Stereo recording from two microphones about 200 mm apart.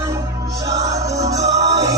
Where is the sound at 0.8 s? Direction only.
15° right (ahead or behind).